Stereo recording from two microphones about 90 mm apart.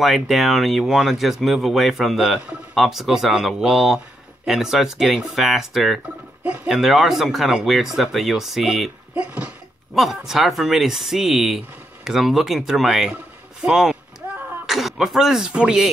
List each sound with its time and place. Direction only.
0.0 s speech: centre (ahead or behind)
6.4 s speech: 15° right (ahead or behind)
6.7 s speech: 5° right (ahead or behind)
9.1 s speech: 15° right (ahead or behind)
9.9 s speech: 5° right (ahead or behind)